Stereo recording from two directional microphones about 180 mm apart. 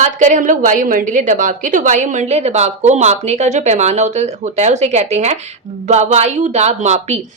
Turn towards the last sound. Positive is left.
turn(degrees=-40)  # may be behind; listen again after turning